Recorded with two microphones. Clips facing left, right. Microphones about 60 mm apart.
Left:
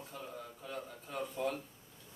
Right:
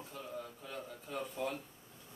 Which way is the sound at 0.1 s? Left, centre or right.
Centre.